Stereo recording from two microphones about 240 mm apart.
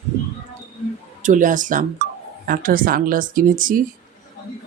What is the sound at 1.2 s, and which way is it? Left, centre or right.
Speech, right.